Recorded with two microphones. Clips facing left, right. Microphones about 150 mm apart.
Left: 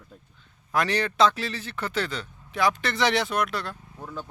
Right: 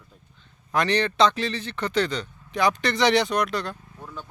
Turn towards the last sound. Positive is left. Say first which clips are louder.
# right 2 dB
turn(degrees=5)  # may be behind; listen again after turning